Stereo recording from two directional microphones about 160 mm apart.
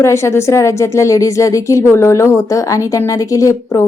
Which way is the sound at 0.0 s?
15° left (ahead or behind).